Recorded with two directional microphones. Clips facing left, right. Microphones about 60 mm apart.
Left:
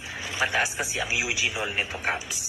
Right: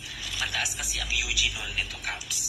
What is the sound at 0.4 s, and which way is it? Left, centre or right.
Speech, left.